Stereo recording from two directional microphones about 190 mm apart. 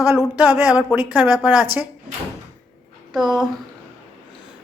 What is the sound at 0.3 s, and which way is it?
A man's voice, 10° right (ahead or behind).